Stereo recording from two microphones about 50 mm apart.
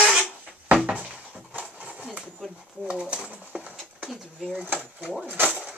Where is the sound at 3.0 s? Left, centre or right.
Right.